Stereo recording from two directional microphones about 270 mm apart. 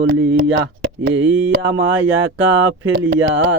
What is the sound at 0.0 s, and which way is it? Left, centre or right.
Speech, right.